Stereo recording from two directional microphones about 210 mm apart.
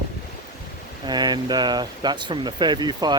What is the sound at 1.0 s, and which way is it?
Speech, 20° right (ahead or behind).